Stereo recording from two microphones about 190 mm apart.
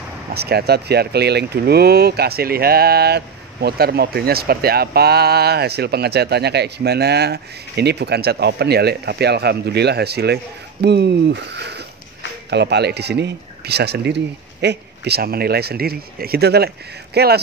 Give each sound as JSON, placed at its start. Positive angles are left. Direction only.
{"t": 0.3, "sound": "speech", "side_deg": -55}